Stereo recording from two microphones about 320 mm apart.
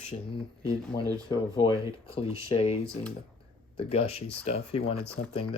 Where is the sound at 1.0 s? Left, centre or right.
Centre.